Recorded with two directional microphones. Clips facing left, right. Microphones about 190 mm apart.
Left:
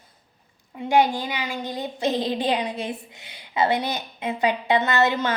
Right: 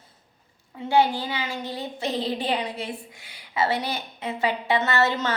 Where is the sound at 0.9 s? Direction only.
15° left (ahead or behind).